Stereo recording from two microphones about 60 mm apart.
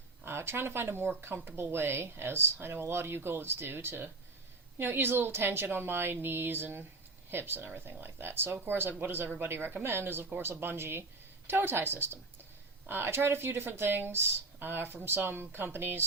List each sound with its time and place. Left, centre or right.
0.3 s speech: right